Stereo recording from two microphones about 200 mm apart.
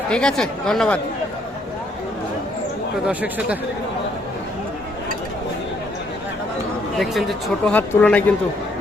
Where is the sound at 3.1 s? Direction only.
5° right (ahead or behind).